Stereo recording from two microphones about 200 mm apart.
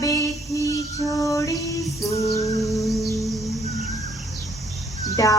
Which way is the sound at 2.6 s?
Centre (ahead or behind).